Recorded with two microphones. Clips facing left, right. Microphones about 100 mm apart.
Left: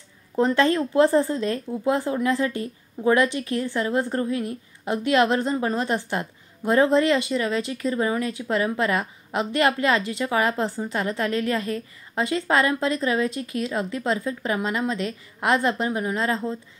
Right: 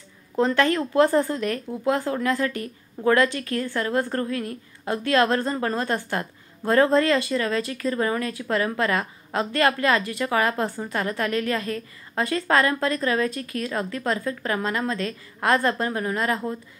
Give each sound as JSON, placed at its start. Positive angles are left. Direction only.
{"t": 0.4, "sound": "a woman's voice", "side_deg": 20}